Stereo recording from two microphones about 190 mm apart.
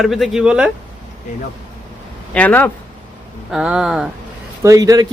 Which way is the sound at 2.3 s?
10° left (ahead or behind).